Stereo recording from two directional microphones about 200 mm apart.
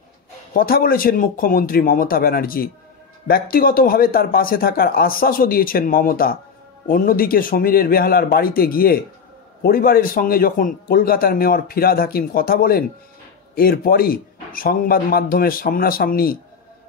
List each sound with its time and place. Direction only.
0.5 s a man's voice: 45° left (ahead or behind)